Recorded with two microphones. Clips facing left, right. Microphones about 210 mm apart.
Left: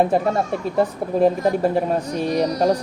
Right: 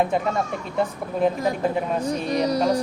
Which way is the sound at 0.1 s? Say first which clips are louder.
Left 4 dB; 40° left (ahead or behind).